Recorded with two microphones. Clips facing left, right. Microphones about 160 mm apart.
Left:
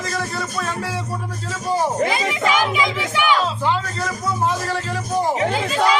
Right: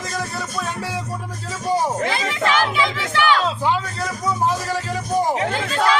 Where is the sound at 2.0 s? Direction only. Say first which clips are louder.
Left 1 dB; 10° left (ahead or behind).